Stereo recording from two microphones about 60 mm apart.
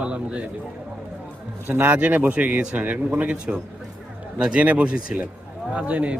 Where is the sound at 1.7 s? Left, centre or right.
Right.